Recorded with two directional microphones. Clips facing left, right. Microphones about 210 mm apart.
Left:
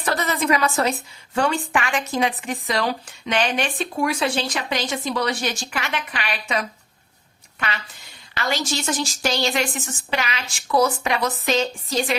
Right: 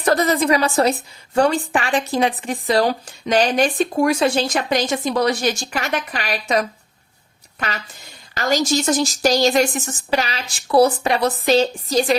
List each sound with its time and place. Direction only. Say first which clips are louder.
0.0 s speech: right 6 dB; 40° right (ahead or behind)
8.4 s speech: right 6 dB; 40° right (ahead or behind)